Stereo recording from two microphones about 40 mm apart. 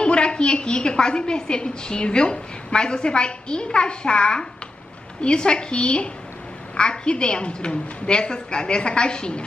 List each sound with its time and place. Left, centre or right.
0.0 s a woman's voice: left